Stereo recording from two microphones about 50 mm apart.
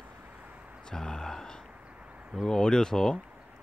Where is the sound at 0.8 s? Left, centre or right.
Centre.